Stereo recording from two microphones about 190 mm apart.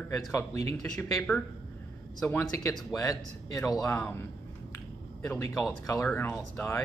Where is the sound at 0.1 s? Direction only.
15° left (ahead or behind).